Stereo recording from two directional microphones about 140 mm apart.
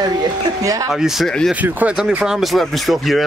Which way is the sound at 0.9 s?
Centre (ahead or behind).